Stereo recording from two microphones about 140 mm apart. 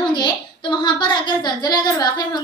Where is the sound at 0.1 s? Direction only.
30° left (ahead or behind).